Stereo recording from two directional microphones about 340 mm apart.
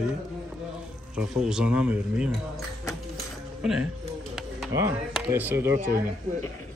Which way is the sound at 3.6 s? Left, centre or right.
Centre.